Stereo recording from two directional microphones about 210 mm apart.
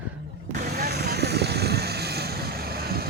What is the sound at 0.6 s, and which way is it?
Vehicle, 50° right (ahead or behind).